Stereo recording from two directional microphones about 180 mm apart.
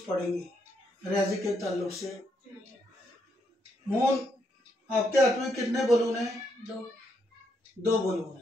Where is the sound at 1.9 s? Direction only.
Centre (ahead or behind).